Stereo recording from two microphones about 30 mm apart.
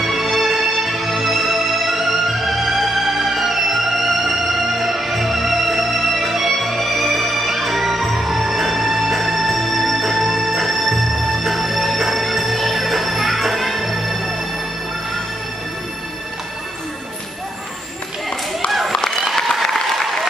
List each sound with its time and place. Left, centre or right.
0.0 s music: centre
18.9 s a sound: centre
19.3 s applause: centre